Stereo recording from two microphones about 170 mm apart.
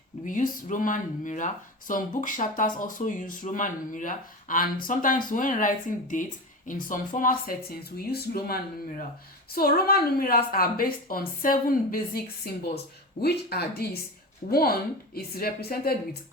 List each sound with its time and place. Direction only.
0.3 s a woman's voice: 50° left (ahead or behind)